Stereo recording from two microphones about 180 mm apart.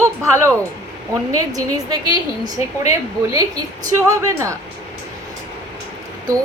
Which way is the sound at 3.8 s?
15° right (ahead or behind).